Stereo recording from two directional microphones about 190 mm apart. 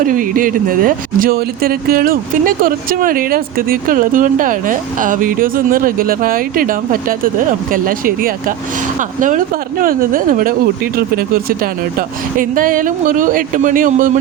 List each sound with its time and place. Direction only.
0.0 s speech: 45° right (ahead or behind)